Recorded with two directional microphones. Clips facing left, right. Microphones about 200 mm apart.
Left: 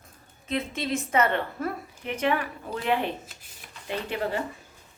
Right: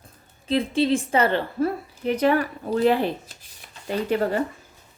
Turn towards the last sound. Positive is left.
turn(degrees=-40)  # may be behind; listen again after turning